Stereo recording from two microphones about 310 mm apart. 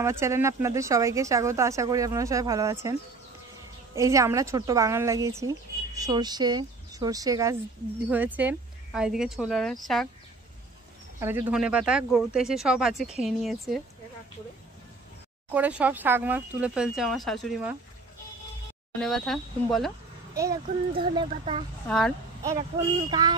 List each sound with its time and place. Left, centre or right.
0.0 s a woman's voice: centre
11.1 s speech: centre
15.5 s speech: centre
18.9 s speech: centre
21.2 s a woman's voice: centre
21.8 s speech: centre
22.4 s a woman's voice: centre